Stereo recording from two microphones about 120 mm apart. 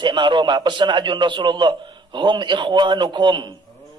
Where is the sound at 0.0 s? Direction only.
40° right (ahead or behind).